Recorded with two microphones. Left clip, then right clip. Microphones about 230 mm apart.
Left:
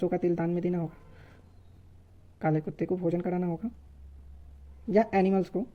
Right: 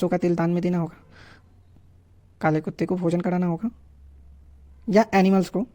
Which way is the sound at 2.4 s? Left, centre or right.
Right.